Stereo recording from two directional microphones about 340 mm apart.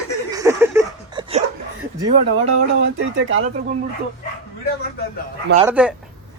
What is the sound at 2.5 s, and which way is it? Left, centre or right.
Speech, right.